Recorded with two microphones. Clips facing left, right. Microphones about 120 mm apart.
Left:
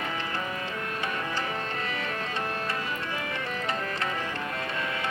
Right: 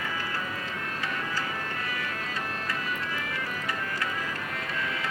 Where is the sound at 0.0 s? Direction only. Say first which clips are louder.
Left 1 dB; 25° left (ahead or behind).